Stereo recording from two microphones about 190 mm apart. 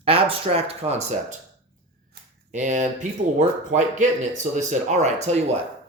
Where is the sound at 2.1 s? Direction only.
40° right (ahead or behind).